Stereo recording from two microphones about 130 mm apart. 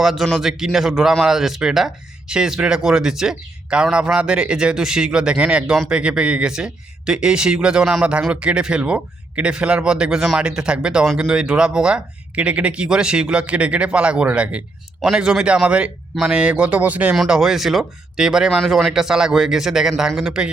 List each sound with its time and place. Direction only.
0.0 s speech: 5° right (ahead or behind)